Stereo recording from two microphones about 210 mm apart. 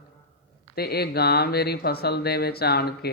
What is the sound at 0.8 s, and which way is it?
Speech, 50° left (ahead or behind).